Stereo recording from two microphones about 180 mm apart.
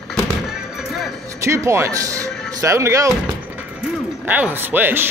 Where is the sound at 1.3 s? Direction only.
15° right (ahead or behind).